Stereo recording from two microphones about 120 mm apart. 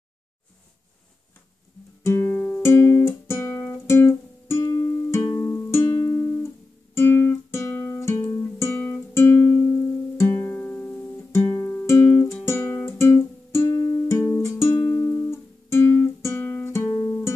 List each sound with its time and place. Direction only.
2.0 s guitar: 20° left (ahead or behind)
8.5 s music: 20° left (ahead or behind)